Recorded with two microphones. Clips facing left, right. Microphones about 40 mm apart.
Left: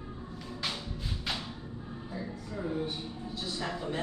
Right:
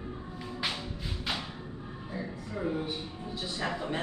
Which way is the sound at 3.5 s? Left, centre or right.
Right.